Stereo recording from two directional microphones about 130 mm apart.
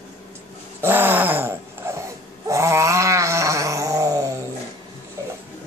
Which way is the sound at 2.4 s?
20° right (ahead or behind).